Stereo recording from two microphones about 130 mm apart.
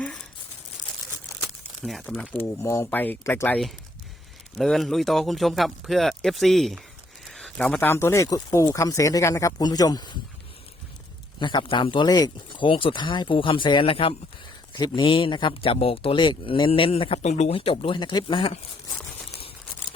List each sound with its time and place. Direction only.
1.8 s speech: centre (ahead or behind)
2.3 s speech: 15° left (ahead or behind)
4.5 s speech: centre (ahead or behind); by 10.2 s 30° left (ahead or behind)
11.3 s a man's voice: 35° left (ahead or behind)